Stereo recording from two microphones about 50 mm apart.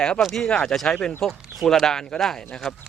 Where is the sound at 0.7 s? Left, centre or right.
Centre.